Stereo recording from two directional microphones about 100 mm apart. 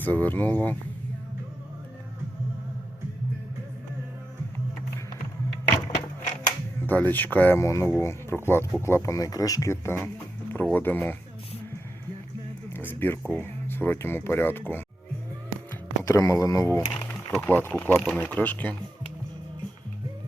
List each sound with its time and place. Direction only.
0.0 s speech: 20° left (ahead or behind)
5.7 s wood: 35° left (ahead or behind)
6.8 s speech: 20° left (ahead or behind)
12.7 s a sound: 20° left (ahead or behind)
13.3 s speech: 20° left (ahead or behind)
16.0 s speech: 30° left (ahead or behind)
16.8 s speech: 55° left (ahead or behind)
17.4 s speech: 20° left (ahead or behind)